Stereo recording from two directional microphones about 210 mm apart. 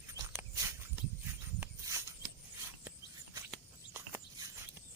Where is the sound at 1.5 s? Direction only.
10° right (ahead or behind).